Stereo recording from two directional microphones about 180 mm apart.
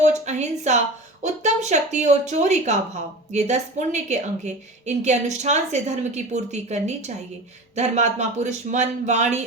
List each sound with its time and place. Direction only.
0.0 s a woman's voice: 40° right (ahead or behind)